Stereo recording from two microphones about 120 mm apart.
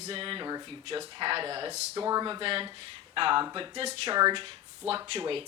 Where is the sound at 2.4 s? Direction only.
45° right (ahead or behind).